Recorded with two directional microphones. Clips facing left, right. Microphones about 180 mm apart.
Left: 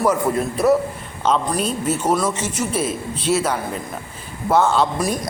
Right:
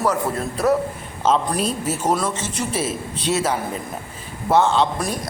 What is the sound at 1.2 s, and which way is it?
A man's voice, 5° right (ahead or behind).